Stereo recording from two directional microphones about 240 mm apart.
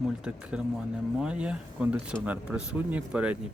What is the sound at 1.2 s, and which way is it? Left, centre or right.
Speech, centre.